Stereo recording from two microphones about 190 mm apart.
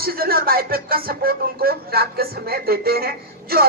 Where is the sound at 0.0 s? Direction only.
50° right (ahead or behind).